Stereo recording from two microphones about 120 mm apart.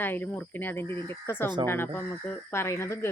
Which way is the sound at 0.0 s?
15° left (ahead or behind).